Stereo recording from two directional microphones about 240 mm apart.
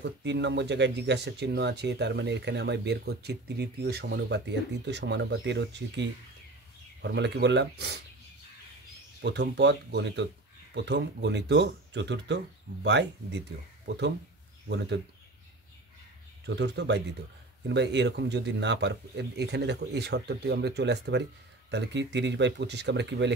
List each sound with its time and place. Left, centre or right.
0.0 s speech: right
9.2 s speech: right
16.4 s speech: right